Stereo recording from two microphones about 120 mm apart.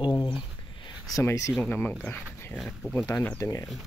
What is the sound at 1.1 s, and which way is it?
Speech, 25° left (ahead or behind).